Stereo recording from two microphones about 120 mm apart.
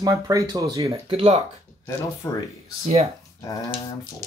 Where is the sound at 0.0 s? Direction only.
25° right (ahead or behind).